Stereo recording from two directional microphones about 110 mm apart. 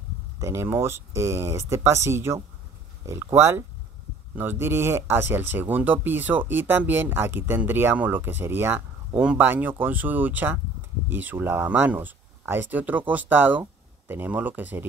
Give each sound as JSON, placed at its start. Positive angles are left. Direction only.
{"t": 0.4, "sound": "speech", "side_deg": -25}